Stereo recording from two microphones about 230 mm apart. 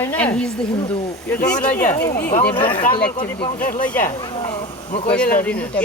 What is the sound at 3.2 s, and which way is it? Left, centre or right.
Speech, left.